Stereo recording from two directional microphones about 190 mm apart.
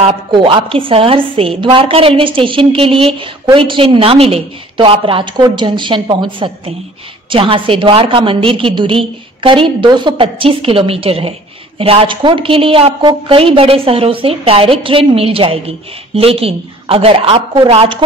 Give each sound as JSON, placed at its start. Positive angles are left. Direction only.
{"t": 0.0, "sound": "a woman's voice", "side_deg": -30}